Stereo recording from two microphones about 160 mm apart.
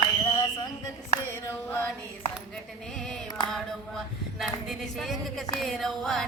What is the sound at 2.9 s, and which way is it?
Music, centre (ahead or behind).